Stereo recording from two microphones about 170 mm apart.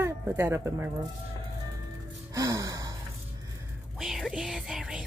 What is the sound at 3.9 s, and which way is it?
Music, centre (ahead or behind).